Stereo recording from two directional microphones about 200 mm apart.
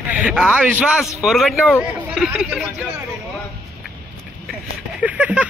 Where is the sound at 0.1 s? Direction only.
5° right (ahead or behind).